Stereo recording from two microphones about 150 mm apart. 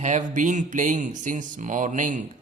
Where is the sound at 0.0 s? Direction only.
55° right (ahead or behind).